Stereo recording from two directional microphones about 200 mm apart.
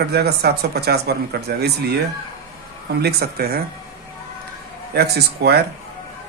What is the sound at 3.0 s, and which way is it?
Speech, 55° right (ahead or behind).